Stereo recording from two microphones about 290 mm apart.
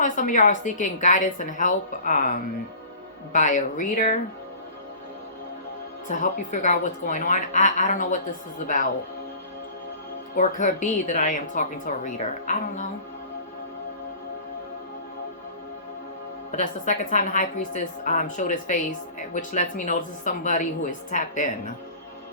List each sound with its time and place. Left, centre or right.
0.0 s a woman's voice: left
6.1 s a woman's voice: left
10.3 s a woman's voice: left
16.6 s a woman's voice: left